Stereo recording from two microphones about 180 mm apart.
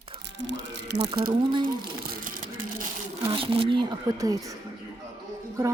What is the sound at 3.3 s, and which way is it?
Speech, 30° right (ahead or behind).